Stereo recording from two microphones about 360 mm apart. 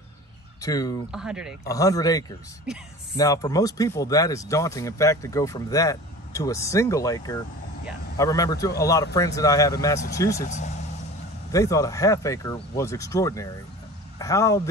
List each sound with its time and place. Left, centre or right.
0.6 s speech: centre
1.1 s speech: centre
1.7 s a man's voice: centre